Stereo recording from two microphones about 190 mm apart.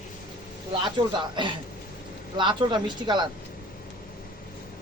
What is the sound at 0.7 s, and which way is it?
Speech, 25° right (ahead or behind).